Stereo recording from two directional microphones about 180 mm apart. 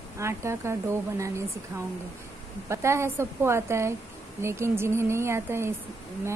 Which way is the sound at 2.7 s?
15° right (ahead or behind).